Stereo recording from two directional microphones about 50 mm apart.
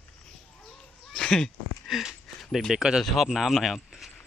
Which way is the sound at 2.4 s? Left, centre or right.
Centre.